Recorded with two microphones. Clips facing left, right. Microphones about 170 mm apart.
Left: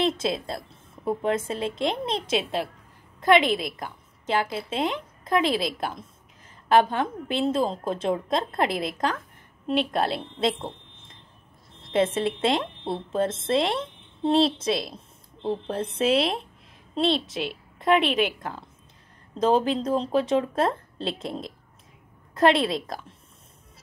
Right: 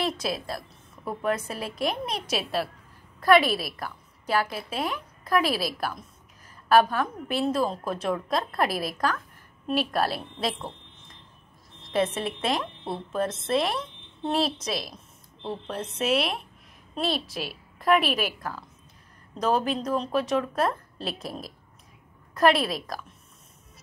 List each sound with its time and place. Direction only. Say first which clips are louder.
0.0 s a woman's voice: left 4 dB; 25° left (ahead or behind)